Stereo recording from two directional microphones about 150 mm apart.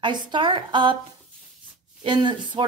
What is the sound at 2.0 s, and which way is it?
Speech, 30° right (ahead or behind).